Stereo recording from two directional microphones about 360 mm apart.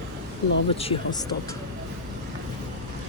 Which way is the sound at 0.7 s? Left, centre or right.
Centre.